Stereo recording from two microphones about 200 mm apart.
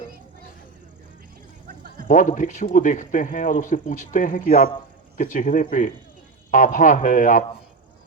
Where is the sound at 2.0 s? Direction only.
40° left (ahead or behind).